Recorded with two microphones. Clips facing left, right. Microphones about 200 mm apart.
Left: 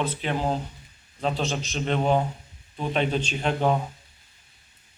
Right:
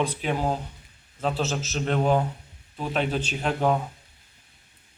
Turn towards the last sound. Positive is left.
turn(degrees=-5)  # may be behind; listen again after turning